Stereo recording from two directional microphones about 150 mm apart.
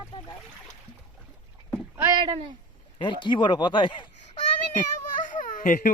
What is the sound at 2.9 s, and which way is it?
Speech, 35° left (ahead or behind).